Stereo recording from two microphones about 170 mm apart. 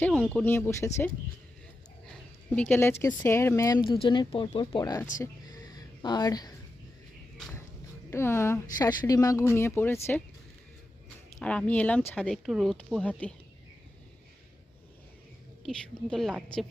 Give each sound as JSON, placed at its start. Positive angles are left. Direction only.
{"t": 0.0, "sound": "speech", "side_deg": 5}
{"t": 2.6, "sound": "speech", "side_deg": 10}
{"t": 5.2, "sound": "a sound", "side_deg": 25}
{"t": 8.1, "sound": "speech", "side_deg": 15}
{"t": 11.3, "sound": "speech", "side_deg": 5}
{"t": 15.6, "sound": "speech", "side_deg": 5}